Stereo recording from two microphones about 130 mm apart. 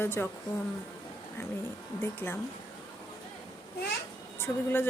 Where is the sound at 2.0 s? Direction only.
15° left (ahead or behind).